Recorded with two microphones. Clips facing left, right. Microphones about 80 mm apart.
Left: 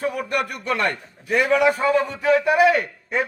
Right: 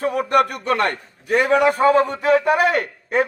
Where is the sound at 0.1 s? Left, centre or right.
Right.